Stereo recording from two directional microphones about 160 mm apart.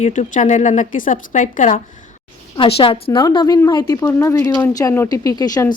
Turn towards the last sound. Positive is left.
turn(degrees=25)  # may be behind; listen again after turning